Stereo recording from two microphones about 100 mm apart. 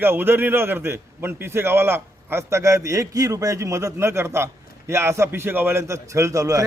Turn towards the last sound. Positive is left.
turn(degrees=-35)  # may be behind; listen again after turning